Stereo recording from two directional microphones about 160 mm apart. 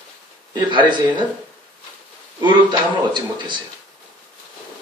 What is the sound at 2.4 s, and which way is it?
Speech, 30° right (ahead or behind).